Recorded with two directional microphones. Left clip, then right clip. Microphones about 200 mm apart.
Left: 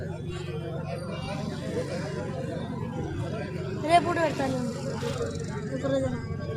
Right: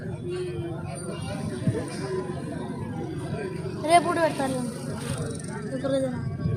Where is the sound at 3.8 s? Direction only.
25° right (ahead or behind).